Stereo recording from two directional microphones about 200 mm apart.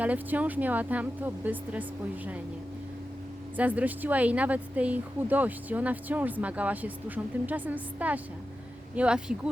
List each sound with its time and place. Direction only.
0.0 s speech: 5° right (ahead or behind)
3.6 s speech: 5° right (ahead or behind)